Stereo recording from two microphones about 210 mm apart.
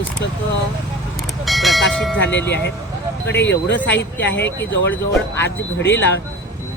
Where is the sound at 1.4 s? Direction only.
Centre (ahead or behind).